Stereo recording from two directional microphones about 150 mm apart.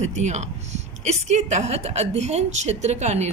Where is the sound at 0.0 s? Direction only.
50° right (ahead or behind).